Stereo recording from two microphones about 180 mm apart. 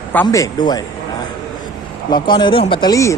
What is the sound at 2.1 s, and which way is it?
Speech, 25° left (ahead or behind).